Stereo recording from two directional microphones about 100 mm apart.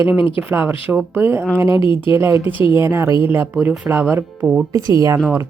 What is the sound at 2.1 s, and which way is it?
A woman's voice, 30° right (ahead or behind).